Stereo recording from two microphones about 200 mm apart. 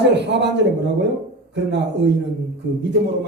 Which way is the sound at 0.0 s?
60° right (ahead or behind).